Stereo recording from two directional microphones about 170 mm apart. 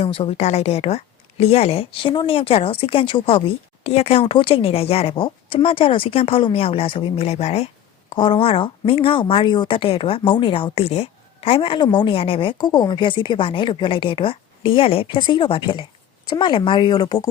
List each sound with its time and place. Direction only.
0.0 s a woman's voice: 35° left (ahead or behind)